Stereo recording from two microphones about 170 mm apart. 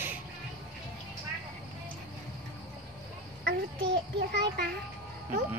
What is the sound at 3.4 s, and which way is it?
Child singing, 85° right.